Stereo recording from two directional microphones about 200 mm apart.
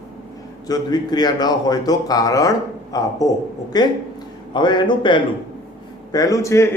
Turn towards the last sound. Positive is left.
turn(degrees=15)  # may be behind; listen again after turning